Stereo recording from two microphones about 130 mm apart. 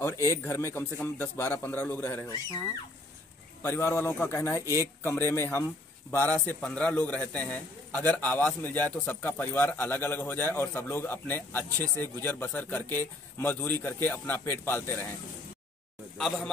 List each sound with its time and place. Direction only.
0.0 s a man's voice: 20° left (ahead or behind)
3.6 s a man's voice: 20° left (ahead or behind)
16.2 s a man's voice: centre (ahead or behind)